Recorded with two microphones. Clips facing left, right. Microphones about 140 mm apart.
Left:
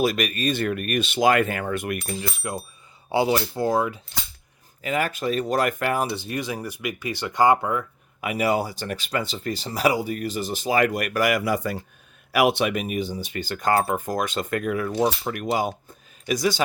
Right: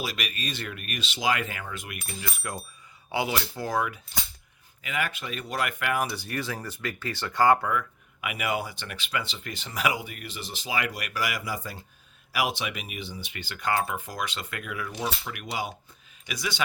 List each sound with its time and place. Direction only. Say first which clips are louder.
0.0 s speech: left 11 dB; 50° left (ahead or behind)
2.2 s speech: left 5 dB; 20° left (ahead or behind)
4.8 s speech: left 7 dB; 40° left (ahead or behind)